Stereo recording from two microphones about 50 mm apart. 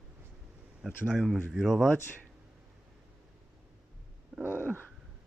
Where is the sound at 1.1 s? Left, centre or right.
Centre.